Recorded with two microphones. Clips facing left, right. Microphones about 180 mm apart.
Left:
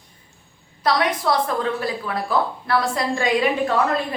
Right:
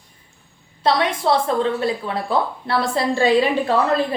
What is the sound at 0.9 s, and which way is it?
A woman's voice, 25° right (ahead or behind).